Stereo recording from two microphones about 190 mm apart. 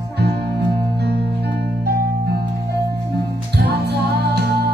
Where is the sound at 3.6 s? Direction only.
60° right (ahead or behind).